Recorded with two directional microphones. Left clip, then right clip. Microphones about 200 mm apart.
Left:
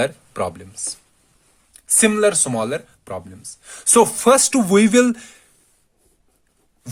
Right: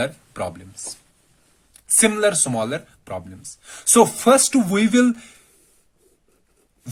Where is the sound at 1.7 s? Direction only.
20° left (ahead or behind).